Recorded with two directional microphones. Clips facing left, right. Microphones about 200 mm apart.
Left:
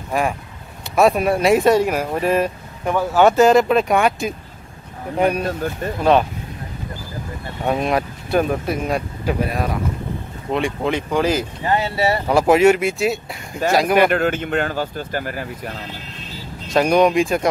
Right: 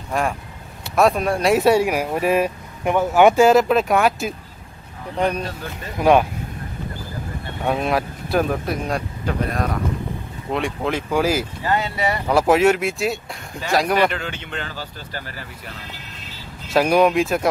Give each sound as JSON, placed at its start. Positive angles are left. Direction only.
{"t": 0.1, "sound": "speech", "side_deg": 5}
{"t": 5.1, "sound": "speech", "side_deg": 10}
{"t": 5.4, "sound": "speech", "side_deg": 50}
{"t": 5.9, "sound": "speech", "side_deg": -10}
{"t": 7.6, "sound": "speech", "side_deg": 0}
{"t": 11.6, "sound": "speech", "side_deg": 25}
{"t": 12.3, "sound": "speech", "side_deg": 0}
{"t": 14.1, "sound": "speech", "side_deg": 50}
{"t": 16.6, "sound": "speech", "side_deg": -5}